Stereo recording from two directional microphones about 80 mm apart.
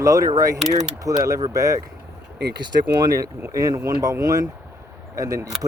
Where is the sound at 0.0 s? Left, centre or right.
Right.